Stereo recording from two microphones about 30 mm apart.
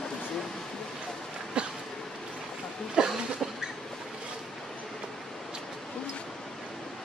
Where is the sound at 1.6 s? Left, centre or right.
Right.